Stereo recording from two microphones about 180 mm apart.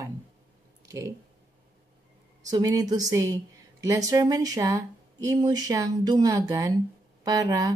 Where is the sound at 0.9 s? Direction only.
15° right (ahead or behind).